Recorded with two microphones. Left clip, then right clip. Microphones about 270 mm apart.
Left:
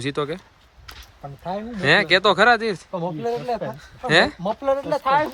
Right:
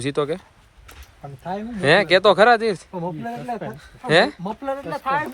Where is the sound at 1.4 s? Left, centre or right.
Centre.